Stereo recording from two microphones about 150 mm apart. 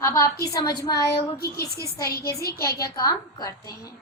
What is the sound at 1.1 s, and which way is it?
A woman's voice, 90° left.